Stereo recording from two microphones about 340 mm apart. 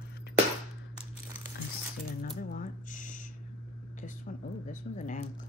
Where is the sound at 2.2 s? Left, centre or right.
Left.